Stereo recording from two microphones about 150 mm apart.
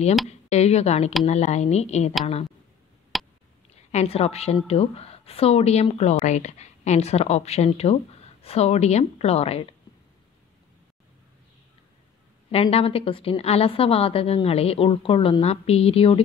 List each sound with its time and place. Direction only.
0.5 s a woman's voice: 45° left (ahead or behind)
3.1 s a sound: centre (ahead or behind)
3.9 s a woman's voice: 45° left (ahead or behind)
12.4 s a woman's voice: 40° left (ahead or behind)